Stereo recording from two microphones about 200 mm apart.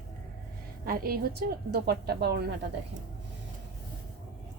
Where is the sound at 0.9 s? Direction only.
50° right (ahead or behind).